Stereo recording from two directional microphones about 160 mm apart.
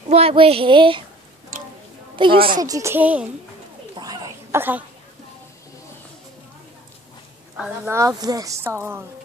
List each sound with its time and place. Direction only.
0.1 s speech: 35° right (ahead or behind)
1.5 s a sound: 60° right (ahead or behind)
2.1 s speech: 30° right (ahead or behind)
2.6 s speech: 20° right (ahead or behind)
3.9 s a sound: 25° right (ahead or behind)
7.5 s a woman's voice: 5° right (ahead or behind)
7.9 s a woman's voice: 20° right (ahead or behind)